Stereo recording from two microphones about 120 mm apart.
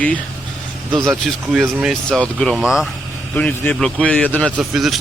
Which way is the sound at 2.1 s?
5° left (ahead or behind).